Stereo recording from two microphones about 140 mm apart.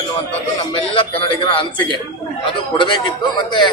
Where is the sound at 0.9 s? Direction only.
40° left (ahead or behind).